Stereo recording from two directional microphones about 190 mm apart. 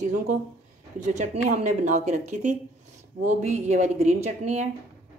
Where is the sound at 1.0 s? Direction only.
40° right (ahead or behind).